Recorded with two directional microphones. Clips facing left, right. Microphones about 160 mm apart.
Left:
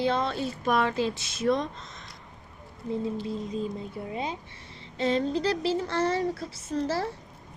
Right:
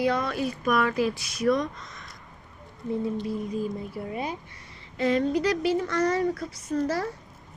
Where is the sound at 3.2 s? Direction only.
25° left (ahead or behind).